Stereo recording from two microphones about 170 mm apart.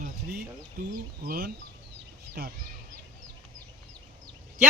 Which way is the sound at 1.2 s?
60° right (ahead or behind).